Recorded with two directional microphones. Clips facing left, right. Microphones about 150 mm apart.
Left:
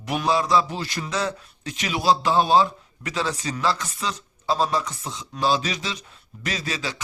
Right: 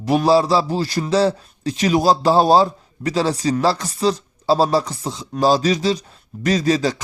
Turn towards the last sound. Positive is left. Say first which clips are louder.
# right 12 dB
turn(degrees=-40)  # may be behind; listen again after turning